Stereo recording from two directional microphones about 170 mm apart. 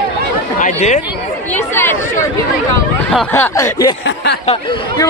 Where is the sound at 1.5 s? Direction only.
10° left (ahead or behind).